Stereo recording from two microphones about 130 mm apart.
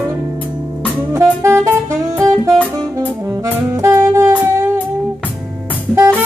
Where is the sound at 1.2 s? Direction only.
25° right (ahead or behind).